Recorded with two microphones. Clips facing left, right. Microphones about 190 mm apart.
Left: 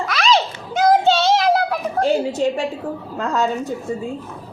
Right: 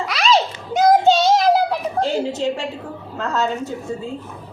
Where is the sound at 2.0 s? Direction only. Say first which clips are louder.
Left 4 dB; 10° left (ahead or behind).